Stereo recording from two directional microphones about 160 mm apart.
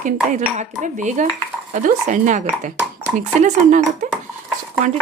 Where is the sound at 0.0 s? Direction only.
50° right (ahead or behind).